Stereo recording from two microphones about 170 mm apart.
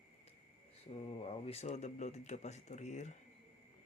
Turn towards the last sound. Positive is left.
turn(degrees=45)  # may be behind; listen again after turning